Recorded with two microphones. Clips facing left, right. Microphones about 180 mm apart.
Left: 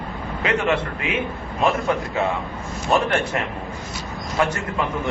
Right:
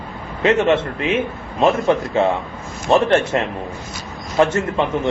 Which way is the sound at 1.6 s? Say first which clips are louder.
Right 5 dB; 25° right (ahead or behind).